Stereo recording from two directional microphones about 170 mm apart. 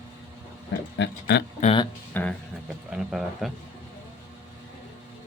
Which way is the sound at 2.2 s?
10° left (ahead or behind).